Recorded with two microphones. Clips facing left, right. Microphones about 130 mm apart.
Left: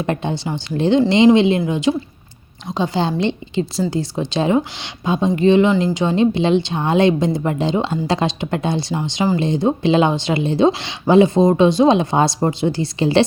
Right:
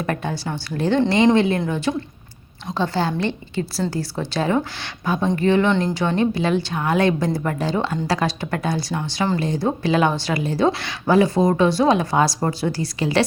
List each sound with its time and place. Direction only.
0.0 s speech: 25° left (ahead or behind)